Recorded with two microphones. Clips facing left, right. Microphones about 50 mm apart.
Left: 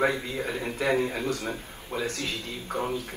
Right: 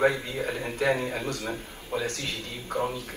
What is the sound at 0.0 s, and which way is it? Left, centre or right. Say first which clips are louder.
A man's voice: right 1 dB; left.